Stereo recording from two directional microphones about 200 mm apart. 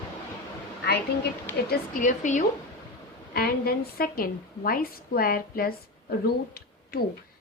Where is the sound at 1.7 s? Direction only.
40° left (ahead or behind).